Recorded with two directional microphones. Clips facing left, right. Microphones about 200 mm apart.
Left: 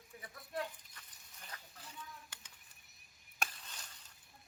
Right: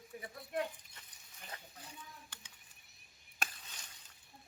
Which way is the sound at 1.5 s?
25° right (ahead or behind).